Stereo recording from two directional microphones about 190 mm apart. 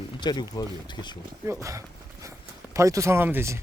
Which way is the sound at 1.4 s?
15° right (ahead or behind).